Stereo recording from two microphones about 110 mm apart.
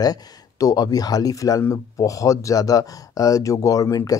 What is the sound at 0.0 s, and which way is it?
Speech, 35° left (ahead or behind).